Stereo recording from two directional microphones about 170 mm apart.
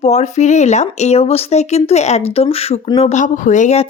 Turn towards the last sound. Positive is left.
turn(degrees=45)  # may be behind; listen again after turning